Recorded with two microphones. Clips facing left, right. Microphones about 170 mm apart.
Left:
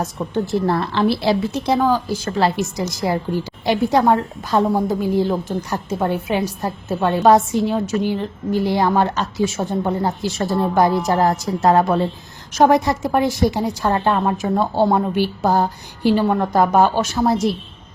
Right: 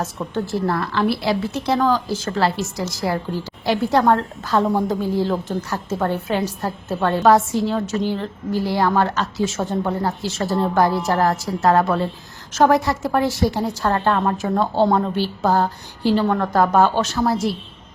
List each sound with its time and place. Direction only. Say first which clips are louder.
0.0 s a woman's voice: left 2 dB; 15° left (ahead or behind)